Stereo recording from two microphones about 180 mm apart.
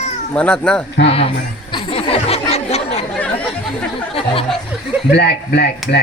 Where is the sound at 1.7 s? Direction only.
30° left (ahead or behind).